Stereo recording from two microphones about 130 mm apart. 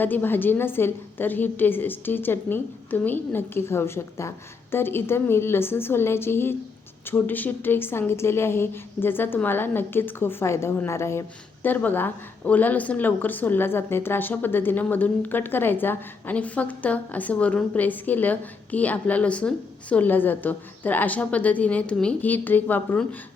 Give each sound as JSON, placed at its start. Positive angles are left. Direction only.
{"t": 0.0, "sound": "a woman's voice", "side_deg": 15}